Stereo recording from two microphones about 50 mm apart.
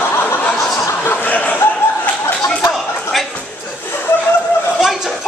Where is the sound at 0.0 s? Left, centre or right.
Left.